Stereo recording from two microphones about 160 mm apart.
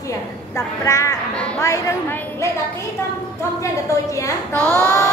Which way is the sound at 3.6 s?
20° left (ahead or behind).